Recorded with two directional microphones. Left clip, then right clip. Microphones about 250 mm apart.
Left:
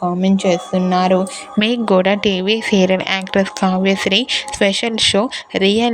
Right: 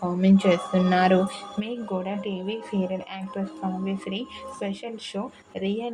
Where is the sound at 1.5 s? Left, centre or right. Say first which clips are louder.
Left 18 dB; left.